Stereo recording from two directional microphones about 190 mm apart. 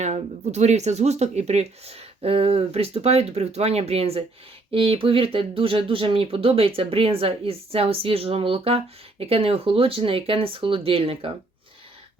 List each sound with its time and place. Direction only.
0.0 s speech: 35° right (ahead or behind)